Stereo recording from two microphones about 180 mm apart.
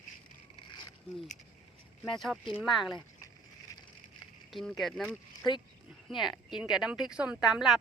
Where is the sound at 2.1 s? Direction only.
Centre (ahead or behind).